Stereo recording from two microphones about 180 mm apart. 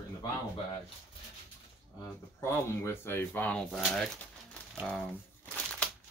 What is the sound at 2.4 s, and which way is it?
Speech, 15° left (ahead or behind).